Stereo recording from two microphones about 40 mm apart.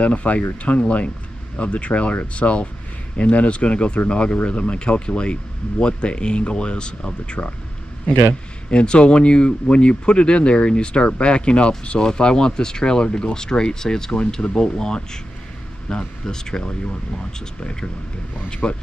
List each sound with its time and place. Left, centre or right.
0.0 s speech: left
8.6 s speech: left
18.6 s speech: left